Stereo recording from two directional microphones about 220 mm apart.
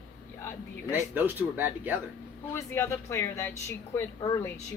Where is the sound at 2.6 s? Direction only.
10° left (ahead or behind).